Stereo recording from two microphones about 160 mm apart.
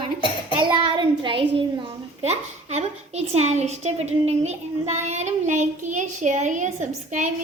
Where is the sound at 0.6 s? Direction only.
30° right (ahead or behind); by 7.3 s 50° right (ahead or behind).